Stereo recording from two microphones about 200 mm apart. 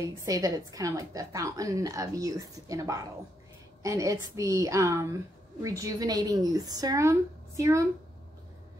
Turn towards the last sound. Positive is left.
turn(degrees=-15)  # may be behind; listen again after turning